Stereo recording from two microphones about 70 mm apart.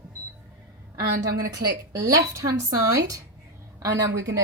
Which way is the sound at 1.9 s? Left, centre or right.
Right.